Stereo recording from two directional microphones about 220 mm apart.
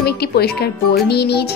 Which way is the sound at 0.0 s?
45° left (ahead or behind).